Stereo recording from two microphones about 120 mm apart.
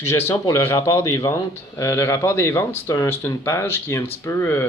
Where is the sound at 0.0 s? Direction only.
20° left (ahead or behind).